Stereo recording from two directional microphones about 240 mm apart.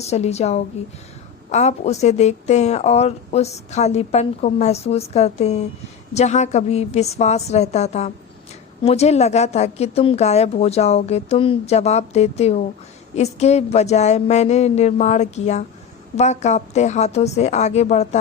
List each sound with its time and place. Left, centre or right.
0.0 s speech: left